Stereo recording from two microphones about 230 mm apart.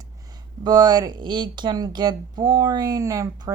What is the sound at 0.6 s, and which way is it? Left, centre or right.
Speech, centre.